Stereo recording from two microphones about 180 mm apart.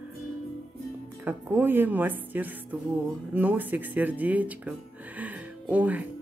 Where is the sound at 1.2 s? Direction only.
10° right (ahead or behind).